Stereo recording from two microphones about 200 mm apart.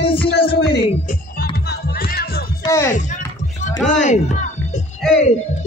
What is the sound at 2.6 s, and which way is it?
Speech, 15° left (ahead or behind).